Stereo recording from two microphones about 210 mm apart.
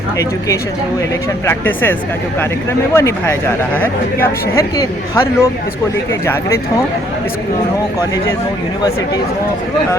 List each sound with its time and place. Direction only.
1.5 s speech: 10° left (ahead or behind)